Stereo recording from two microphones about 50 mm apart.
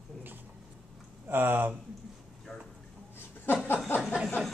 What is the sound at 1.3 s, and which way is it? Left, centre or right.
Speech, right.